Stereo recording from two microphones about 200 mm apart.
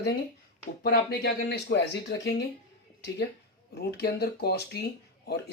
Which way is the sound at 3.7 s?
55° left (ahead or behind).